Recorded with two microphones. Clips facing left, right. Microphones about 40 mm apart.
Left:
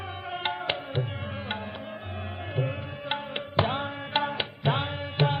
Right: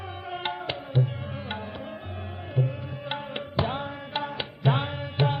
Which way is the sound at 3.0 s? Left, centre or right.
Centre.